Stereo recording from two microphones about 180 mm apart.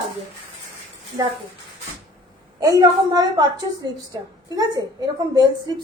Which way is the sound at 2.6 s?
20° right (ahead or behind).